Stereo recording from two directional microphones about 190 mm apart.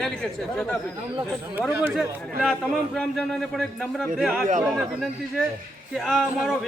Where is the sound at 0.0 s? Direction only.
5° left (ahead or behind).